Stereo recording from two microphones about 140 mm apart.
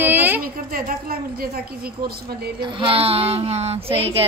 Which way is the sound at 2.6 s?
35° right (ahead or behind).